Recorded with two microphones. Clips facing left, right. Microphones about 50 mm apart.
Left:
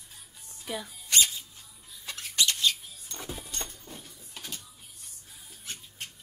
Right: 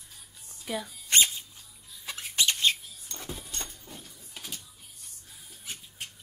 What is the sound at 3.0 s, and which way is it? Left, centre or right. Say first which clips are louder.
Vehicle: left 1 dB; centre.